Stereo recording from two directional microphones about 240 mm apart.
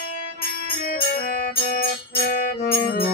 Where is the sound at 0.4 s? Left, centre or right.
Left.